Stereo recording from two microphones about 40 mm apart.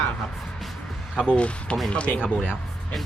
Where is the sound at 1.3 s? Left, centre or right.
Left.